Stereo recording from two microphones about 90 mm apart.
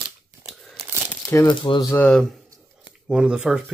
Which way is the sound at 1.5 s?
60° left (ahead or behind).